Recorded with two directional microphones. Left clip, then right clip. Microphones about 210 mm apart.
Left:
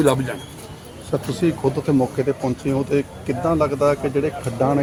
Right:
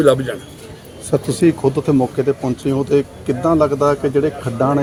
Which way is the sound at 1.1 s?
40° right (ahead or behind).